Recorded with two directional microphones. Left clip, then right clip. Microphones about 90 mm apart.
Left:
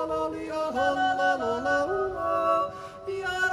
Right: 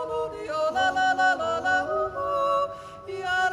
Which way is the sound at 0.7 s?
55° right (ahead or behind).